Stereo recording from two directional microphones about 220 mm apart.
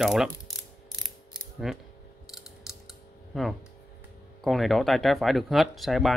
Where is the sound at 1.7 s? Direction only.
Centre (ahead or behind).